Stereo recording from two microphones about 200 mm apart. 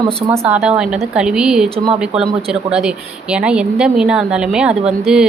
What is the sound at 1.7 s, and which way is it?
Speech, 30° right (ahead or behind).